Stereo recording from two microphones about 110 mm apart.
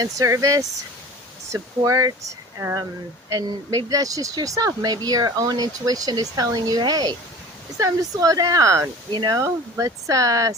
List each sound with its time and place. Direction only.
0.0 s speech: 30° right (ahead or behind)
1.8 s speech: 35° right (ahead or behind)